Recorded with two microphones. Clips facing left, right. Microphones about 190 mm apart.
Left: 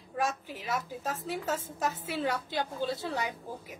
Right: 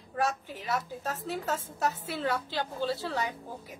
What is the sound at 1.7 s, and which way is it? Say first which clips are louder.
A woman's voice: right 1 dB; 15° left (ahead or behind).